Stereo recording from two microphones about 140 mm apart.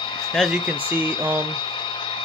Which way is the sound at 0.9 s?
15° right (ahead or behind).